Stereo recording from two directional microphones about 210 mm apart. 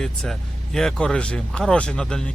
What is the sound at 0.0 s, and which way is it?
Speech, centre (ahead or behind).